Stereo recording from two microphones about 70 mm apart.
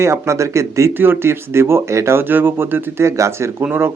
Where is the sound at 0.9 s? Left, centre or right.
Right.